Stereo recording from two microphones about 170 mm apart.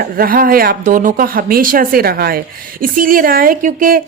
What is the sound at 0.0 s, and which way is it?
Speech, 60° right (ahead or behind).